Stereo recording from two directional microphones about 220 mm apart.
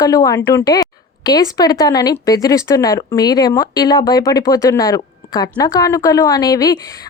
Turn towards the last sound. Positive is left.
turn(degrees=15)  # may be behind; listen again after turning